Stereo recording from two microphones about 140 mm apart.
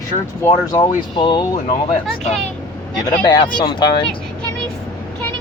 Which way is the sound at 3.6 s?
30° left (ahead or behind).